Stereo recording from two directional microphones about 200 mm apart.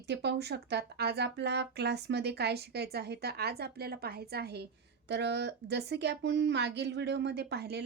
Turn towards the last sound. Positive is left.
turn(degrees=-55)  # may be behind; listen again after turning